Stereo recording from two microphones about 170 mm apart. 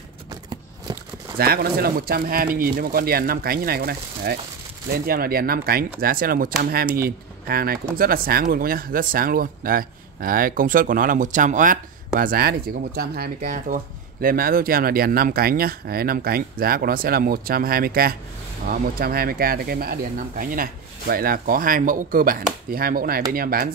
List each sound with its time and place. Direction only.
1.4 s speech: 65° right (ahead or behind)